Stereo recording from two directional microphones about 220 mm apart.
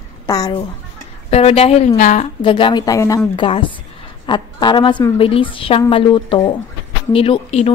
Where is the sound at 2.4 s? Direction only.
20° left (ahead or behind).